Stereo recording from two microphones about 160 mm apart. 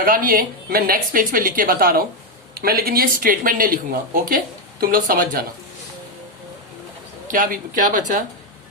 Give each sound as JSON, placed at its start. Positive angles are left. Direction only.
{"t": 0.0, "sound": "a woman's voice", "side_deg": -60}
{"t": 7.3, "sound": "a woman's voice", "side_deg": -60}